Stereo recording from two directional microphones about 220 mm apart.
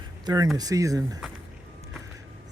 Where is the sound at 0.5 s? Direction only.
15° right (ahead or behind).